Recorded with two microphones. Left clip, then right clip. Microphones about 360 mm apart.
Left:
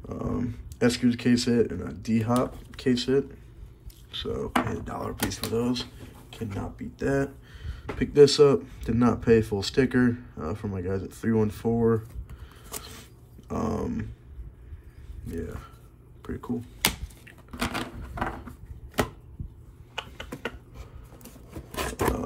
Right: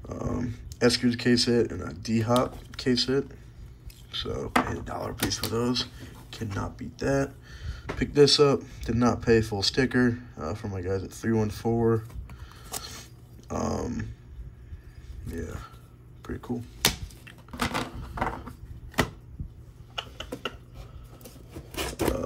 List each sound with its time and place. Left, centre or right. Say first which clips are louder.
0.1 s speech: left 1 dB; centre
12.6 s a sound: right 3 dB; centre
15.2 s speech: left 1 dB; centre
16.2 s typing: left 1 dB; centre
20.0 s typing: right 1 dB; centre